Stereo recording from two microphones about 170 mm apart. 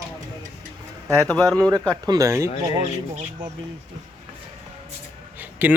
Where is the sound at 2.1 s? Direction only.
20° right (ahead or behind).